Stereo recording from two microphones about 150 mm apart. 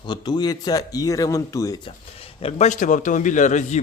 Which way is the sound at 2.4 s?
50° left (ahead or behind).